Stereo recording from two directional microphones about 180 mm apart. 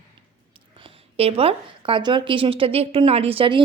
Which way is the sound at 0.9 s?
30° right (ahead or behind).